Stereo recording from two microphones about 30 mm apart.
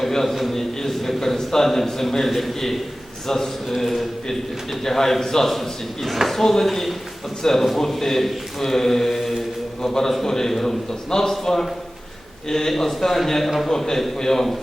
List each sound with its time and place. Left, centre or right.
0.1 s a man's voice: centre
4.9 s a man's voice: centre
5.5 s a man's voice: centre
9.8 s a man's voice: centre